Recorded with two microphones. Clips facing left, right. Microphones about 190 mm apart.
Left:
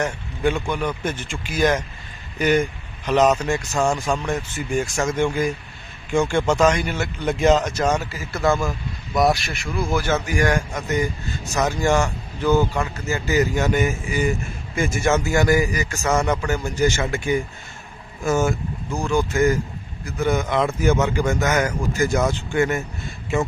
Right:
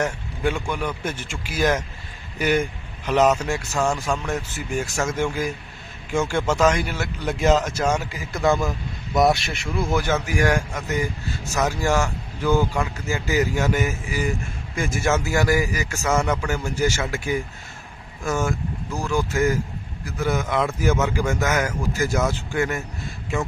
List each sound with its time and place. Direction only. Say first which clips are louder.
0.0 s a man's voice: left 2 dB; 5° right (ahead or behind); by 9.9 s 25° right (ahead or behind)
10.2 s a man's voice: left 1 dB; 5° right (ahead or behind)
18.4 s speech: left 3 dB; centre (ahead or behind)